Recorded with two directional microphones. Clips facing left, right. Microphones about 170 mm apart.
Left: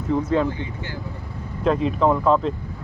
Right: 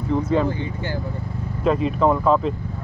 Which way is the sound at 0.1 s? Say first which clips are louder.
Even; centre (ahead or behind).